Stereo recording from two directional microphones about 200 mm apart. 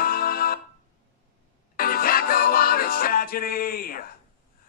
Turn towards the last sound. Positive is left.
turn(degrees=45)  # may be behind; listen again after turning